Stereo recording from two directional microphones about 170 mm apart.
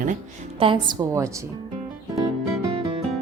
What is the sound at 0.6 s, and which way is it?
Speech, 30° right (ahead or behind).